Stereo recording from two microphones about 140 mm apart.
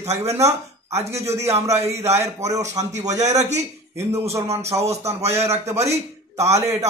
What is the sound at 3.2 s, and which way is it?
Speech, 55° right (ahead or behind).